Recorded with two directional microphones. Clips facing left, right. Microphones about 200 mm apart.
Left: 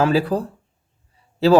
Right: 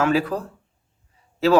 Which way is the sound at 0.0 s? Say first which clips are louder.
Left 3 dB; 30° left (ahead or behind).